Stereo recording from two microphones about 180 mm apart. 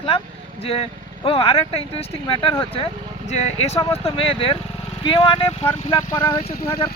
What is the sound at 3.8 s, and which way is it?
Speech, 15° left (ahead or behind).